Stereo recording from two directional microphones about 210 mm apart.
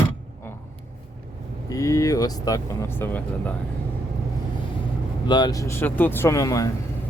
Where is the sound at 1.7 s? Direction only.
15° left (ahead or behind).